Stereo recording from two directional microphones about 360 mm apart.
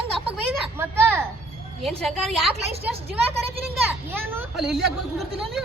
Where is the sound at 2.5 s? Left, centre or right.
Centre.